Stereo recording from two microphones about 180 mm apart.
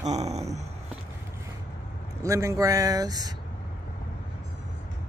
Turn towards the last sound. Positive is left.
turn(degrees=-20)  # may be behind; listen again after turning